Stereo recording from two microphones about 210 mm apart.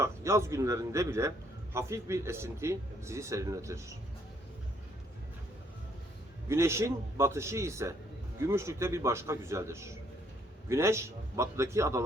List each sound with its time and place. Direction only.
0.0 s a man's voice: 15° right (ahead or behind)
6.5 s a man's voice: 15° right (ahead or behind)